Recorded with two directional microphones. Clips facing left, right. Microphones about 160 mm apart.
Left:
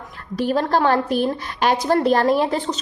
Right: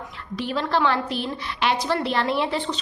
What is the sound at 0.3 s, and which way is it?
A woman's voice, 45° left (ahead or behind).